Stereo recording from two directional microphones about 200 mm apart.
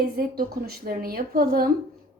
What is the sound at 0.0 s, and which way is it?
A woman's voice, 50° right (ahead or behind).